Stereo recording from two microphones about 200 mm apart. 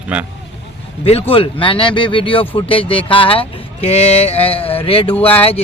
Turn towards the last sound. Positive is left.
turn(degrees=30)  # may be behind; listen again after turning